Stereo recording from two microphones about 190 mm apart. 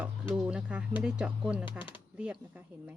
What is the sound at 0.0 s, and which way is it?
Speech, 5° right (ahead or behind).